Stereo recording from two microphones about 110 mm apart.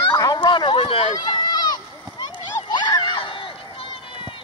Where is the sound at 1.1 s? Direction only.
40° left (ahead or behind).